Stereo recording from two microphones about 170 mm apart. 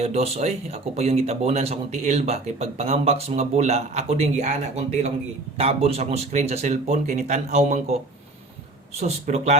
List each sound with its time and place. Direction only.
0.0 s speech: 35° right (ahead or behind)
9.0 s speech: 40° right (ahead or behind)